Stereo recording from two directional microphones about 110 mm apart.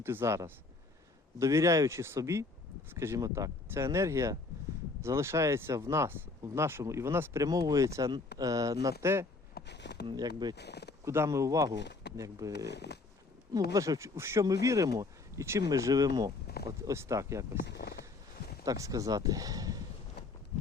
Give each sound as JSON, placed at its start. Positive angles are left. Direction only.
{"t": 0.0, "sound": "speech", "side_deg": -20}
{"t": 10.1, "sound": "speech", "side_deg": -40}
{"t": 11.0, "sound": "speech", "side_deg": -25}
{"t": 18.6, "sound": "speech", "side_deg": -35}